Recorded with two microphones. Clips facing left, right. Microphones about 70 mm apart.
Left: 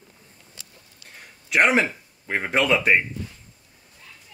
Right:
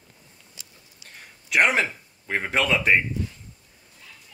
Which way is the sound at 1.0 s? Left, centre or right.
Centre.